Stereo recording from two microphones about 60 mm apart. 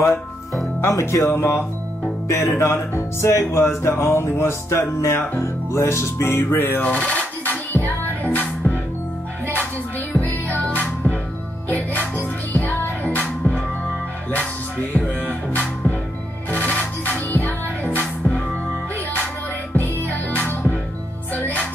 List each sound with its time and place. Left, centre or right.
0.7 s speech: left
6.8 s music: left
10.2 s music: left
14.3 s music: left
19.7 s music: left